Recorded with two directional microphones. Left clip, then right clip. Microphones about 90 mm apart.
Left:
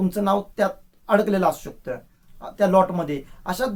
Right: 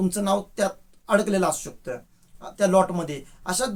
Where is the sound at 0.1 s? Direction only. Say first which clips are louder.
Left 2 dB; 25° right (ahead or behind).